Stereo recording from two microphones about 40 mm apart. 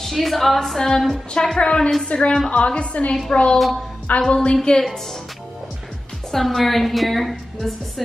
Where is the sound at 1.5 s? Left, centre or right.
Left.